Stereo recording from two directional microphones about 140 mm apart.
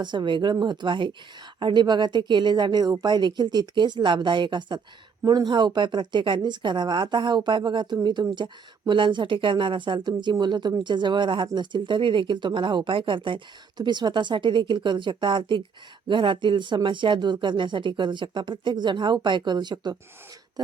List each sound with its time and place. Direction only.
0.0 s speech: 35° right (ahead or behind)